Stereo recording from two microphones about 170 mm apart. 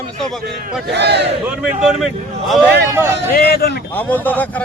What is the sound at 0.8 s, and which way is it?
Speech, 80° right.